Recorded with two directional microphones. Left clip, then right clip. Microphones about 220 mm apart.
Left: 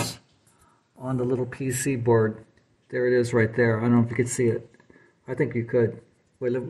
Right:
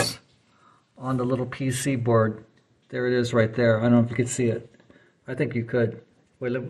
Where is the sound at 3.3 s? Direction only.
Centre (ahead or behind).